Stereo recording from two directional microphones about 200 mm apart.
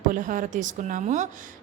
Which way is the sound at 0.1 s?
40° right (ahead or behind).